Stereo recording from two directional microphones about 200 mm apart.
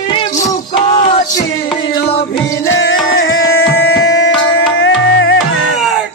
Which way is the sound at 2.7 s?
75° left (ahead or behind).